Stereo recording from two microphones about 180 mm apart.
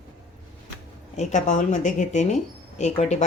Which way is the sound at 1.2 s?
40° left (ahead or behind).